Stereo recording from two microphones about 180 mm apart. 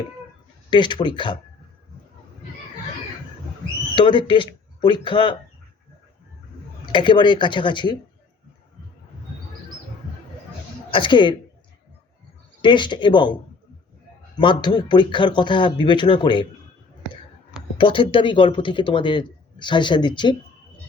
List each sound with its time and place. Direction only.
0.7 s speech: 25° left (ahead or behind)
3.9 s speech: 25° left (ahead or behind)
6.9 s speech: 25° left (ahead or behind)
10.9 s speech: 25° left (ahead or behind)
12.6 s speech: 25° left (ahead or behind)
14.3 s speech: 25° left (ahead or behind)
17.7 s speech: 30° left (ahead or behind)